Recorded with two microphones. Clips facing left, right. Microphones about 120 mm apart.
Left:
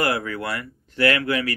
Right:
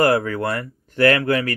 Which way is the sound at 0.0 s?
45° right (ahead or behind).